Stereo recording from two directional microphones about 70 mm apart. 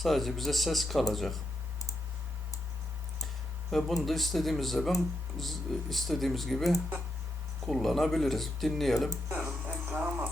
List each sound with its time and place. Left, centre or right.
0.0 s speech: centre
3.7 s speech: centre
9.6 s a sound: right